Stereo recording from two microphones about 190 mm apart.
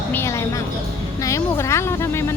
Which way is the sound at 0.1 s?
15° left (ahead or behind).